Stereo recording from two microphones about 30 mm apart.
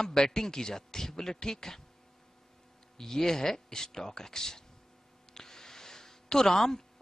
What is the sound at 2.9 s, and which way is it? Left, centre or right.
A man's voice, centre.